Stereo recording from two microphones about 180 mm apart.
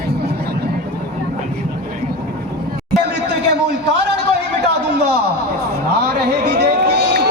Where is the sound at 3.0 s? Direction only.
70° right (ahead or behind).